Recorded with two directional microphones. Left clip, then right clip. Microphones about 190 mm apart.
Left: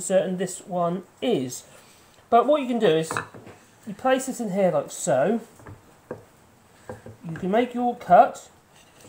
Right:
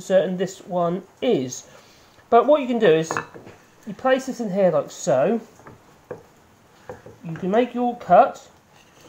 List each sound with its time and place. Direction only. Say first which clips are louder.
0.0 s speech: right 3 dB; 15° right (ahead or behind)
7.4 s speech: right 2 dB; 10° right (ahead or behind)